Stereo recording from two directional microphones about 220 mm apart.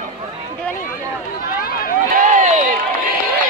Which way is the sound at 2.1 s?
35° right (ahead or behind).